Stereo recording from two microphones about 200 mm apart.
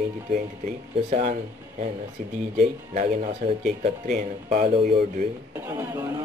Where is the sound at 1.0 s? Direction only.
35° right (ahead or behind).